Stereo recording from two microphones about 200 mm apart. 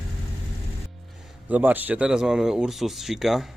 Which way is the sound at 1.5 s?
10° right (ahead or behind).